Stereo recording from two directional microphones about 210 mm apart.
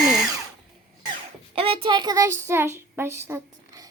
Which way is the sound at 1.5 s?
25° right (ahead or behind).